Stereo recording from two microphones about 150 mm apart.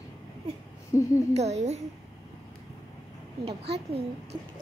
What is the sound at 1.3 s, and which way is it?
Speech, 45° right (ahead or behind).